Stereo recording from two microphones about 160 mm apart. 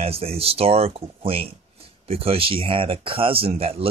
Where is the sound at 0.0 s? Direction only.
35° right (ahead or behind).